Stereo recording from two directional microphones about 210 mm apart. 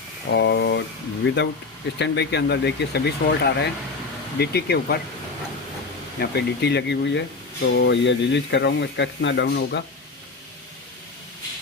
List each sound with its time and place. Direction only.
0.3 s speech: 55° left (ahead or behind)
6.1 s speech: 50° left (ahead or behind)